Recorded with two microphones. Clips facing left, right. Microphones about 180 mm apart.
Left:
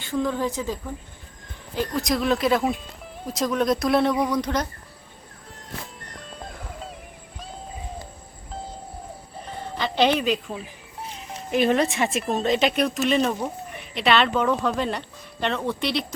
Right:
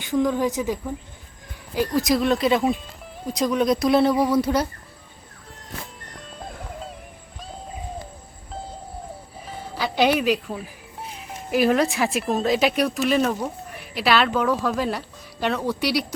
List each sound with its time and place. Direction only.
0.0 s speech: 15° right (ahead or behind)
1.7 s speech: 5° right (ahead or behind)
9.5 s a sound: centre (ahead or behind)
11.5 s speech: 5° right (ahead or behind)